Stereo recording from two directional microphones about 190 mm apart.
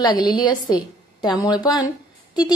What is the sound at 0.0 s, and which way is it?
A woman's voice, 20° left (ahead or behind).